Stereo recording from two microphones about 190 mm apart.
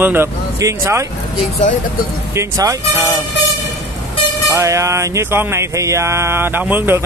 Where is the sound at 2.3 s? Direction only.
15° right (ahead or behind).